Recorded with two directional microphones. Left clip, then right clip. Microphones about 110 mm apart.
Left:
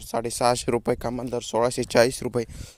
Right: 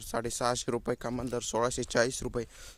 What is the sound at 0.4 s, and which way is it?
Speech, 70° left (ahead or behind).